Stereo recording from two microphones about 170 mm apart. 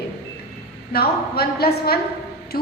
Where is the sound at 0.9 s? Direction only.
65° left (ahead or behind).